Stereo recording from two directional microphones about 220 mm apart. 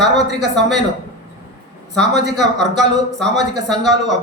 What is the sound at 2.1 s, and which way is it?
Speech, 50° right (ahead or behind).